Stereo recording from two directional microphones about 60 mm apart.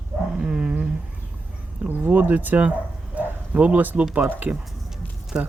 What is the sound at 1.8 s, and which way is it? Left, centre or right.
Speech, right.